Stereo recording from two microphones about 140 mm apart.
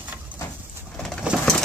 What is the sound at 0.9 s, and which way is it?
Bird, 5° left (ahead or behind).